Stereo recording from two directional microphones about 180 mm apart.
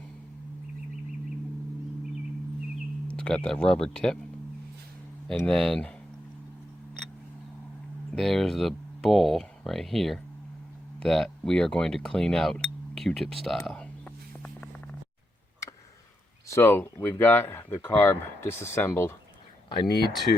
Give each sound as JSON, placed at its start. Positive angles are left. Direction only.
{"t": 3.1, "sound": "speech", "side_deg": 5}
{"t": 5.3, "sound": "speech", "side_deg": 5}
{"t": 8.1, "sound": "speech", "side_deg": 0}
{"t": 13.7, "sound": "a sound", "side_deg": 5}
{"t": 16.5, "sound": "speech", "side_deg": 15}
{"t": 19.7, "sound": "speech", "side_deg": 25}